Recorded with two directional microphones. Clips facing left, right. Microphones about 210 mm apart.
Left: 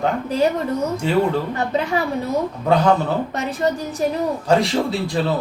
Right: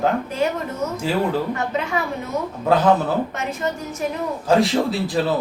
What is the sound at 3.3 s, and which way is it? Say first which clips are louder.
Speech: left 4 dB; 35° left (ahead or behind).